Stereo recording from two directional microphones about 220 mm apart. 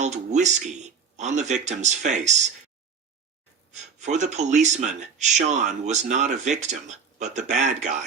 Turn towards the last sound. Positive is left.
turn(degrees=-35)  # may be behind; listen again after turning